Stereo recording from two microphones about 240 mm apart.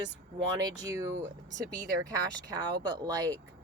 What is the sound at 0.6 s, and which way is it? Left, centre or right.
Speech, centre.